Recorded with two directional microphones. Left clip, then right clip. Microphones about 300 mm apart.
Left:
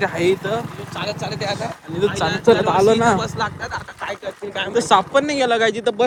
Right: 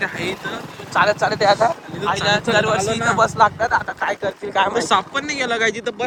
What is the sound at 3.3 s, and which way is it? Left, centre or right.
Speech, centre.